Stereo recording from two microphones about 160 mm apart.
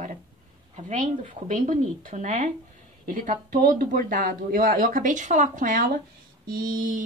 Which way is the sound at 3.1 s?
60° right (ahead or behind).